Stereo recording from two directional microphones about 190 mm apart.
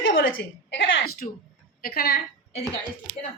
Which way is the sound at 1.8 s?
55° left (ahead or behind).